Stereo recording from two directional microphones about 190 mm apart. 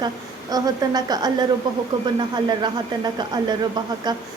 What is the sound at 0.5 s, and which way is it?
Speech, 20° right (ahead or behind).